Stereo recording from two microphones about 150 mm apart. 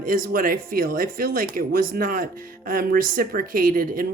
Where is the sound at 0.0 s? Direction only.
70° right (ahead or behind).